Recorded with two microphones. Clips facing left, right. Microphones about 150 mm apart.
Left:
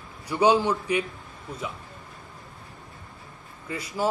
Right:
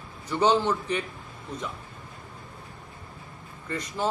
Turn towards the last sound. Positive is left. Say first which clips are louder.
# left 2 dB
turn(degrees=10)  # may be behind; listen again after turning